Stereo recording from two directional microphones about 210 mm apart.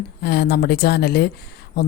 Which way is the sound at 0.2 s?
50° left (ahead or behind).